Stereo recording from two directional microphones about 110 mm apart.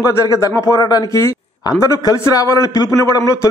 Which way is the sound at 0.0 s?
30° left (ahead or behind).